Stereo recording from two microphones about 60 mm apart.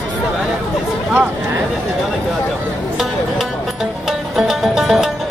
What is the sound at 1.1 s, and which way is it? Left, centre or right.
Speech, right.